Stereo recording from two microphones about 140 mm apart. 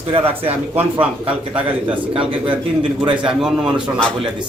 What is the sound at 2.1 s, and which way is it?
Speech, 40° right (ahead or behind).